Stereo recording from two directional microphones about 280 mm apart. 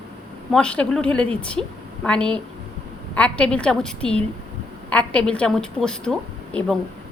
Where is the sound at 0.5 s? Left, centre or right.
Centre.